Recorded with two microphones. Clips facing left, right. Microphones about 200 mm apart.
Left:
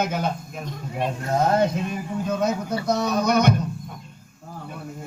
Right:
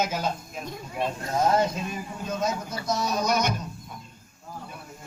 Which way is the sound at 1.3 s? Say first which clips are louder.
Left 3 dB; 60° left (ahead or behind).